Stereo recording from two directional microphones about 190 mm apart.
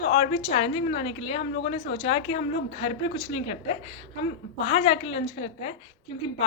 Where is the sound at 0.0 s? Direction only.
30° left (ahead or behind).